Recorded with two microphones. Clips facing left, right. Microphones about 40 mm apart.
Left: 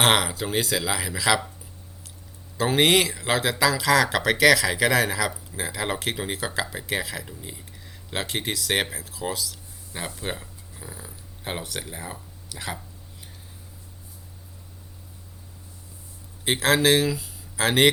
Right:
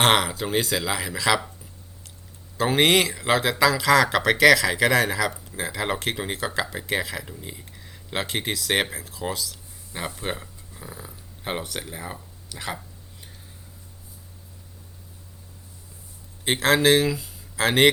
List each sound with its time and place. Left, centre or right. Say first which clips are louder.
0.0 s speech: right 1 dB; centre
2.6 s speech: right 1 dB; centre
16.4 s a man's voice: right 1 dB; centre